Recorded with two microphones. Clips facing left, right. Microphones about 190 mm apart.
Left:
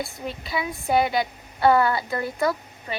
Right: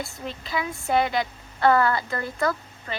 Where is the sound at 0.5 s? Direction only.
15° left (ahead or behind).